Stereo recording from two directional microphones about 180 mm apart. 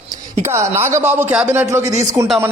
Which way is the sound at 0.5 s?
15° right (ahead or behind).